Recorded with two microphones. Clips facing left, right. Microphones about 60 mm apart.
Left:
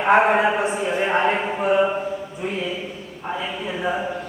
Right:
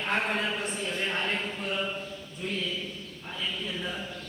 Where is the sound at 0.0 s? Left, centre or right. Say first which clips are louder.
Left 13 dB; left.